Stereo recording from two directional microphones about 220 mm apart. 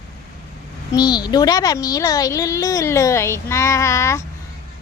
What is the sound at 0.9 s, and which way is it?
A woman's voice, 20° left (ahead or behind).